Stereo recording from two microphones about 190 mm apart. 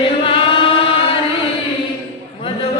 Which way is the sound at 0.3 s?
25° left (ahead or behind).